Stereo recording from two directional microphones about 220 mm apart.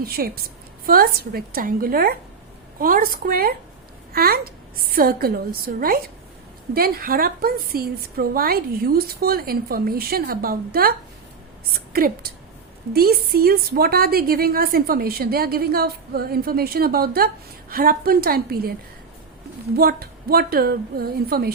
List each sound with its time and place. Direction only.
0.0 s a woman's voice: 45° right (ahead or behind)
11.9 s a woman's voice: 40° right (ahead or behind)
19.7 s a woman's voice: 45° right (ahead or behind)